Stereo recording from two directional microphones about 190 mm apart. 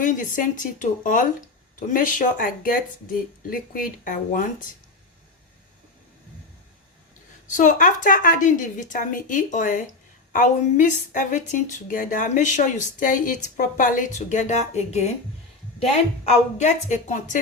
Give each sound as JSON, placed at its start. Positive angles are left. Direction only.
{"t": 0.0, "sound": "a woman's voice", "side_deg": 45}
{"t": 7.5, "sound": "a woman's voice", "side_deg": 45}